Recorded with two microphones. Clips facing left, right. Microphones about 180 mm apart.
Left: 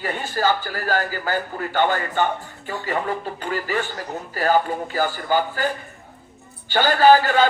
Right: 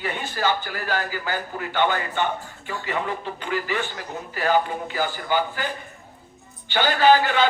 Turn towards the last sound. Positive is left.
turn(degrees=45)  # may be behind; listen again after turning